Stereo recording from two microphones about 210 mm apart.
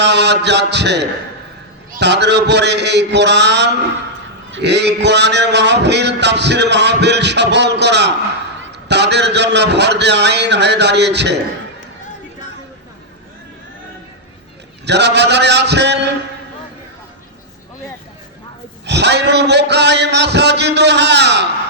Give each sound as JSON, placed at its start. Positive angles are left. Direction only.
{"t": 0.0, "sound": "a man's voice", "side_deg": -55}
{"t": 14.8, "sound": "a man's voice", "side_deg": -55}
{"t": 18.9, "sound": "a man's voice", "side_deg": -55}